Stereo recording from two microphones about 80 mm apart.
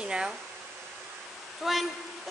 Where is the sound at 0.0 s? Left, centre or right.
Centre.